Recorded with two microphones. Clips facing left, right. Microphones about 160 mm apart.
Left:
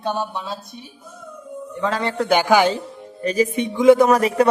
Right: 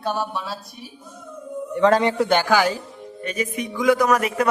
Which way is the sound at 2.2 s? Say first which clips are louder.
Left 3 dB; 15° left (ahead or behind).